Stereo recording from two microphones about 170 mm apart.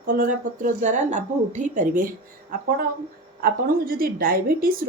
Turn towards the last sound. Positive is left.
turn(degrees=-55)  # may be behind; listen again after turning